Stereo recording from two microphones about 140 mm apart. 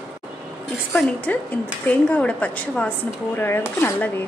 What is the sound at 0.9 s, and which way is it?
Speech, 10° left (ahead or behind).